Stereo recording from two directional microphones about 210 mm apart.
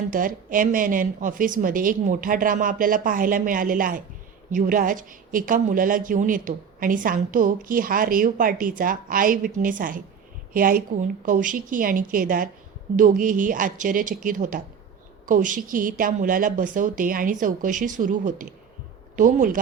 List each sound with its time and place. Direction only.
0.1 s a woman's voice: 40° right (ahead or behind)